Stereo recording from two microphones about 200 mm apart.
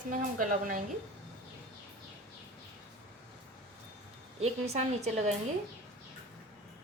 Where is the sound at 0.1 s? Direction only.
40° right (ahead or behind).